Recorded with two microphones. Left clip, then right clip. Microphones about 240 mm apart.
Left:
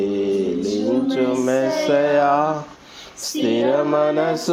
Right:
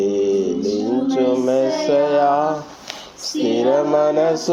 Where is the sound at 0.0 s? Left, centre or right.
Left.